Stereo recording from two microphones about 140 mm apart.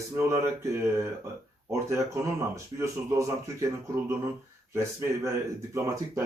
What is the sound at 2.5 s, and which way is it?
Speech, 20° right (ahead or behind).